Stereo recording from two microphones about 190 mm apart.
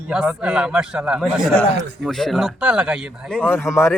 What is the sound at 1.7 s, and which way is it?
Speech, 65° right (ahead or behind).